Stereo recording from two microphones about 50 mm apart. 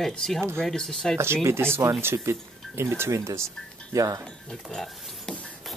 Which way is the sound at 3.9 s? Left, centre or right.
Right.